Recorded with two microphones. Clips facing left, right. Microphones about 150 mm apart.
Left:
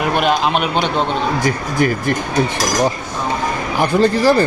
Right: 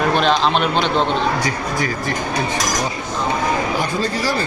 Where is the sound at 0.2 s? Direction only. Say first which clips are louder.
Even; 10° left (ahead or behind).